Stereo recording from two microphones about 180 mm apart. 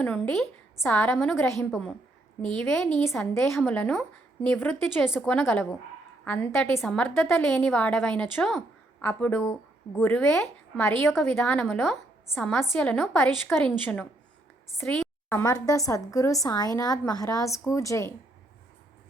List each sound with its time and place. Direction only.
0.0 s a woman's voice: 5° left (ahead or behind)
3.0 s a woman's voice: 15° left (ahead or behind)
3.3 s a woman's voice: centre (ahead or behind)
10.8 s a woman's voice: 15° left (ahead or behind)
11.6 s a woman's voice: centre (ahead or behind)
12.3 s a woman's voice: 10° left (ahead or behind)
15.3 s a woman's voice: 15° left (ahead or behind)